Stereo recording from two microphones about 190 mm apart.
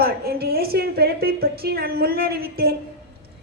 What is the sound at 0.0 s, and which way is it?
A woman's voice, 55° right (ahead or behind).